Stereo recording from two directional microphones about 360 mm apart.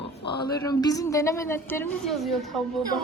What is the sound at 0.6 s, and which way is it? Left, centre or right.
A woman's voice, centre.